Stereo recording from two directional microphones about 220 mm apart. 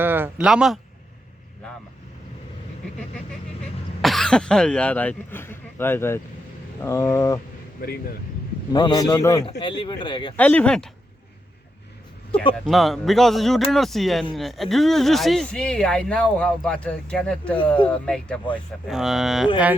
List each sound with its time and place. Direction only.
0.0 s speech: 10° right (ahead or behind)
4.0 s speech: centre (ahead or behind)
7.8 s speech: 45° left (ahead or behind)
8.7 s a man's voice: 20° left (ahead or behind)
10.3 s speech: 5° left (ahead or behind)
12.6 s speech: centre (ahead or behind)